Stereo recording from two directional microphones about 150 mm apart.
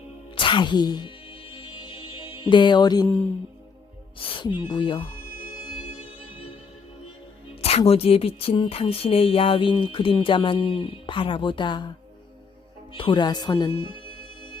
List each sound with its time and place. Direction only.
0.3 s music: 35° left (ahead or behind)
4.2 s speech: 35° left (ahead or behind)
7.6 s speech: 40° left (ahead or behind)
12.9 s speech: 35° left (ahead or behind)